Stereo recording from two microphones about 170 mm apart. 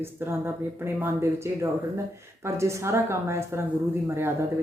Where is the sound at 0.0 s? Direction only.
15° right (ahead or behind).